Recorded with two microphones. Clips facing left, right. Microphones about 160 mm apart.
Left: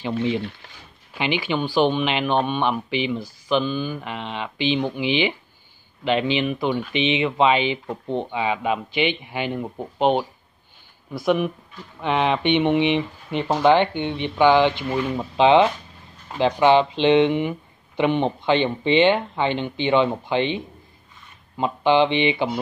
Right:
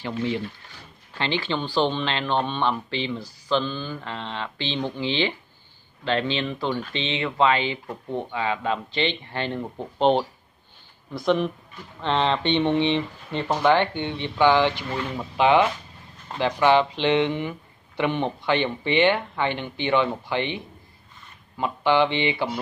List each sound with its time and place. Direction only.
0.0 s speech: 20° left (ahead or behind)